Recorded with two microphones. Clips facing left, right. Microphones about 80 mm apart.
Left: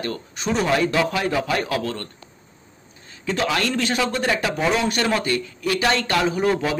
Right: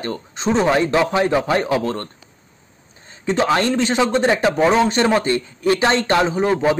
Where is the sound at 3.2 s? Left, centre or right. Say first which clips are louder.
Right 5 dB; right.